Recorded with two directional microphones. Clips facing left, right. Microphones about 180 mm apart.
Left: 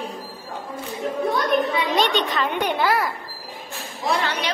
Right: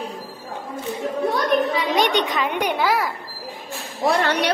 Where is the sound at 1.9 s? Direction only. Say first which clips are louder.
Right 2 dB; 15° right (ahead or behind).